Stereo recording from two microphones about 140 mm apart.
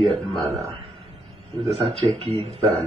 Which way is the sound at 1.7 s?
45° right (ahead or behind).